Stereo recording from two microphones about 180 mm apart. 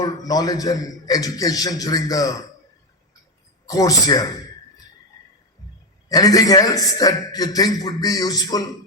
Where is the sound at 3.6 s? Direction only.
20° left (ahead or behind).